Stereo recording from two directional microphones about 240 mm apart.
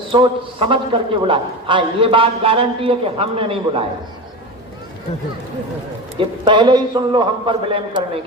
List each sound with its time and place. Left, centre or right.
0.1 s a man's voice: right
6.1 s a man's voice: centre